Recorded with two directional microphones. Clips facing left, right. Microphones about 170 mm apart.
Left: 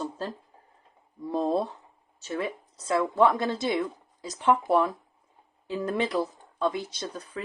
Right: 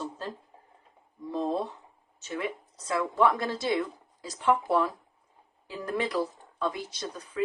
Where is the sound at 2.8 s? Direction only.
30° left (ahead or behind).